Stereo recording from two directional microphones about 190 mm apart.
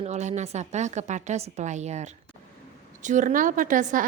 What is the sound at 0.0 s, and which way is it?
A woman's voice, 35° right (ahead or behind).